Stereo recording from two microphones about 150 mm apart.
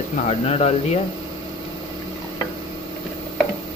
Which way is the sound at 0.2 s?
45° left (ahead or behind).